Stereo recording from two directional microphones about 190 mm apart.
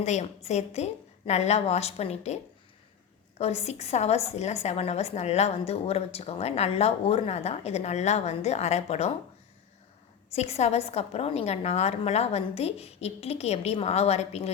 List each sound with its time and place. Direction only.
0.0 s a woman's voice: 35° left (ahead or behind)
10.3 s a woman's voice: 35° left (ahead or behind)